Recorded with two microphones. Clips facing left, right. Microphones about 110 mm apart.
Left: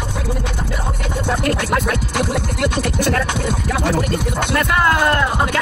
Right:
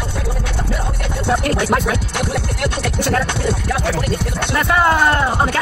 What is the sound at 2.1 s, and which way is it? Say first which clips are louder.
Music: left 1 dB; 10° left (ahead or behind).